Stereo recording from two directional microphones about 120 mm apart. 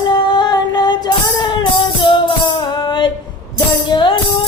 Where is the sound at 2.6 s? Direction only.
40° left (ahead or behind).